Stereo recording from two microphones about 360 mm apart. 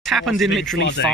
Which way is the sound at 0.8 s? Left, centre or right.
Left.